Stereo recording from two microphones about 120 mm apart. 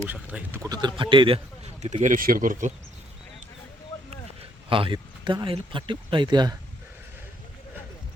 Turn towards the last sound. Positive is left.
turn(degrees=-35)  # may be behind; listen again after turning